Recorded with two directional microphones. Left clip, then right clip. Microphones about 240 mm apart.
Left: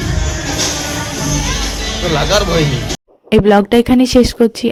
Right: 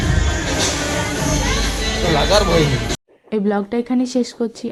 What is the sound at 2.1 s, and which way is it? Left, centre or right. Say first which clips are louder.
Music: left 2 dB; left.